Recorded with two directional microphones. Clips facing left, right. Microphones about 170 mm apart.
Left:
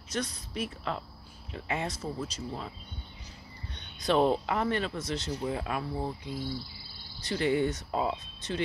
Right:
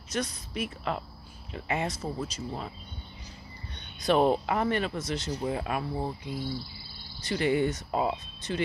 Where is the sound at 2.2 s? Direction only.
20° right (ahead or behind).